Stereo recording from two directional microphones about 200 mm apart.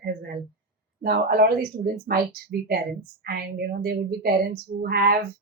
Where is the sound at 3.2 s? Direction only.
50° right (ahead or behind).